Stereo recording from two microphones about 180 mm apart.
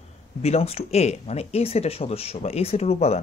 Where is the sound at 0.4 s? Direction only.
35° left (ahead or behind).